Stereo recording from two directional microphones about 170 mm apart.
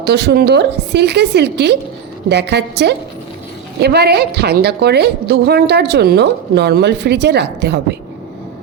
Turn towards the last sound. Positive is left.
turn(degrees=-80)